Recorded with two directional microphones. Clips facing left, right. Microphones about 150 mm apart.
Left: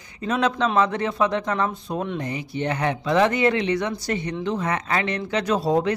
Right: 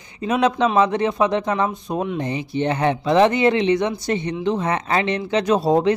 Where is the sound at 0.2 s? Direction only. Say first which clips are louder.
Right 4 dB; 15° right (ahead or behind).